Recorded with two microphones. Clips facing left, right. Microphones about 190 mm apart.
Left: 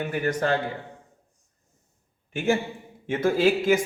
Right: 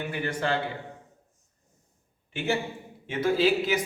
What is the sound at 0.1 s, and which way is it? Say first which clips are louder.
Speech: left 5 dB; 45° left (ahead or behind).